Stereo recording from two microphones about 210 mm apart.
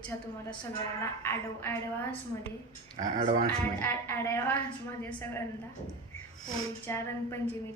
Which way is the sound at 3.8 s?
10° left (ahead or behind).